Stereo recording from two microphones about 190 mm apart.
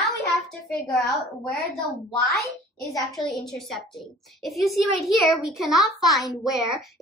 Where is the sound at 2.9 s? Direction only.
25° left (ahead or behind).